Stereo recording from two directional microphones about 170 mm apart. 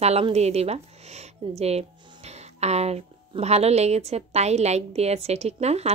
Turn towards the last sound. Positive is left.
turn(degrees=-40)  # may be behind; listen again after turning